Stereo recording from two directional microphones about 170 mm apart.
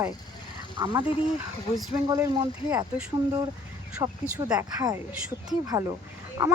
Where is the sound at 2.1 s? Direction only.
20° right (ahead or behind).